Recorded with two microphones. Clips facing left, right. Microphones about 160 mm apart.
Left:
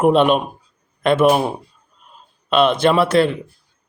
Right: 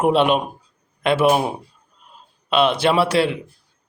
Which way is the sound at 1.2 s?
5° right (ahead or behind).